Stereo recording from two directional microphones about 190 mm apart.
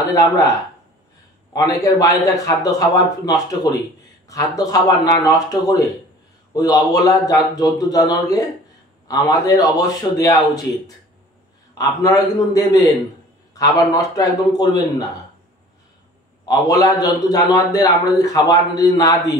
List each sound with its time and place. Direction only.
0.1 s a man's voice: 15° left (ahead or behind)
1.5 s a man's voice: 20° left (ahead or behind)
11.8 s a man's voice: 15° left (ahead or behind)
16.4 s a man's voice: 20° left (ahead or behind)